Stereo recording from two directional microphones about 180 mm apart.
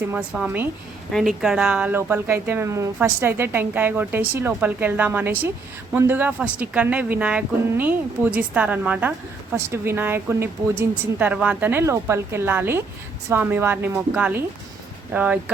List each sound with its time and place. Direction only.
0.0 s speech: 10° right (ahead or behind)